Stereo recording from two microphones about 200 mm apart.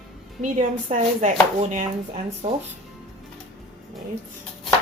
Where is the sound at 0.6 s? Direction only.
35° right (ahead or behind).